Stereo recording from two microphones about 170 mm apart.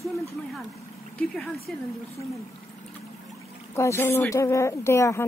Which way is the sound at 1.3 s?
Centre (ahead or behind).